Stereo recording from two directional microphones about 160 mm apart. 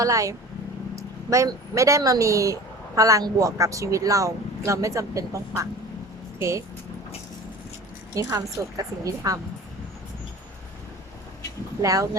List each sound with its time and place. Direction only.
0.0 s speech: 20° right (ahead or behind)
8.1 s speech: 20° right (ahead or behind)
11.8 s speech: 20° right (ahead or behind)